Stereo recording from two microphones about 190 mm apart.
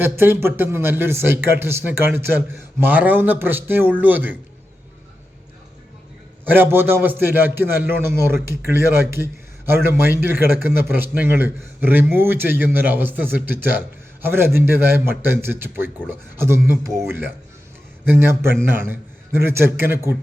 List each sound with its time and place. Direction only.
0.0 s a man's voice: 10° right (ahead or behind)
6.4 s a man's voice: 10° right (ahead or behind)